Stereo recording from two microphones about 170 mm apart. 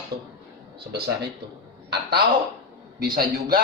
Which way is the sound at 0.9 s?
75° right (ahead or behind).